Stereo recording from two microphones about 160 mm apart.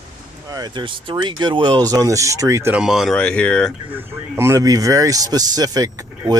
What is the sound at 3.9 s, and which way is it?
Speech, 15° right (ahead or behind).